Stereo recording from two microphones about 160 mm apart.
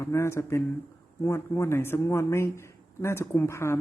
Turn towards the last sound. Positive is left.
turn(degrees=15)  # may be behind; listen again after turning